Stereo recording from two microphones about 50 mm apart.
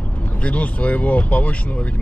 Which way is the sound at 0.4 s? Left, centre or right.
Left.